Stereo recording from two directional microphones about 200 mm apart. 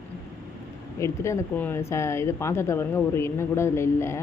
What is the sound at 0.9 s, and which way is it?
Speech, 15° left (ahead or behind).